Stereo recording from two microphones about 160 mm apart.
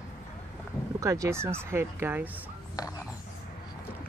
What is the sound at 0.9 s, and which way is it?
Speech, 20° right (ahead or behind).